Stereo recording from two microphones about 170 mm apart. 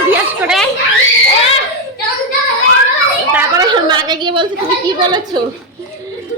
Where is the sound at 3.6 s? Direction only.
25° right (ahead or behind).